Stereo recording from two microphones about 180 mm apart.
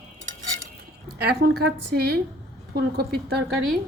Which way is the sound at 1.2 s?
60° right (ahead or behind).